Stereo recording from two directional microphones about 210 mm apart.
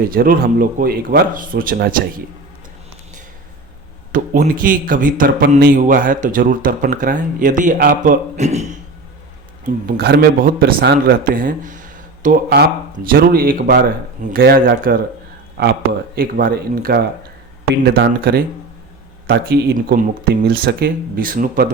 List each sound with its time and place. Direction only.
0.1 s speech: 45° right (ahead or behind)
4.1 s speech: 40° right (ahead or behind)
9.6 s speech: 45° right (ahead or behind)
16.1 s speech: 45° right (ahead or behind)